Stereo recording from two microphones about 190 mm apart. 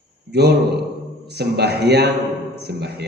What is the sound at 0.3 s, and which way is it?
A man's voice, 60° right (ahead or behind).